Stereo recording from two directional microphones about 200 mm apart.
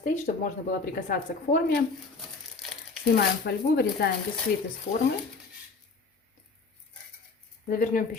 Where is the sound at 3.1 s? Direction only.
50° left (ahead or behind).